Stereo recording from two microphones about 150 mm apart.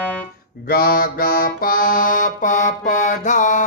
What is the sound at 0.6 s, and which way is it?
Music, 80° left.